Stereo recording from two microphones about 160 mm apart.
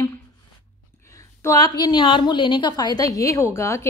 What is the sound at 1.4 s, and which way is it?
A woman's voice, 20° left (ahead or behind).